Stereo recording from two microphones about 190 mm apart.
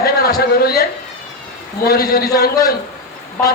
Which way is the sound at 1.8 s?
55° left (ahead or behind).